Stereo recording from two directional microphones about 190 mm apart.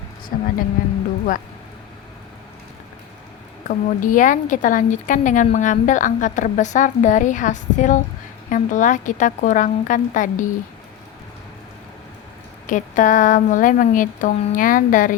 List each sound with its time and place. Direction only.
0.3 s a woman's voice: 50° left (ahead or behind)
3.7 s a woman's voice: 45° left (ahead or behind)
12.6 s a woman's voice: 45° left (ahead or behind)